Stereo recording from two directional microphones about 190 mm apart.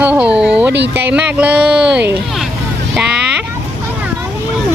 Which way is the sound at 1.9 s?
60° right (ahead or behind).